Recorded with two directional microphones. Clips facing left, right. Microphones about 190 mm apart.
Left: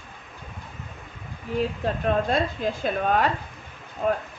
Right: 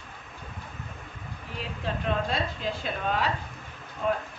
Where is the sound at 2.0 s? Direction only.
50° left (ahead or behind).